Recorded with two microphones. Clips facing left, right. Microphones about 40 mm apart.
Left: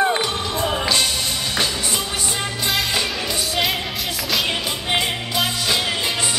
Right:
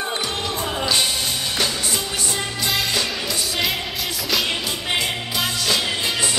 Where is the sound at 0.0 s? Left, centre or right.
Left.